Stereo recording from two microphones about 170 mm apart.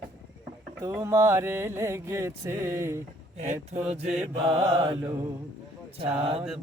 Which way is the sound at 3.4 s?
40° right (ahead or behind).